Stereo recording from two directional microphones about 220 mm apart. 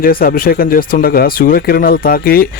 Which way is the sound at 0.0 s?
40° left (ahead or behind).